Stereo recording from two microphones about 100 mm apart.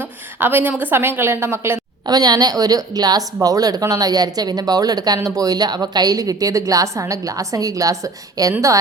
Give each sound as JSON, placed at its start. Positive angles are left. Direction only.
{"t": 0.0, "sound": "a woman's voice", "side_deg": -20}
{"t": 2.0, "sound": "speech", "side_deg": -40}